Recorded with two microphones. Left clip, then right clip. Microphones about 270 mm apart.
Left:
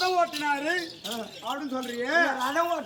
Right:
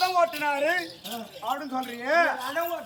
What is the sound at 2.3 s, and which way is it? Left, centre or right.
Speech, centre.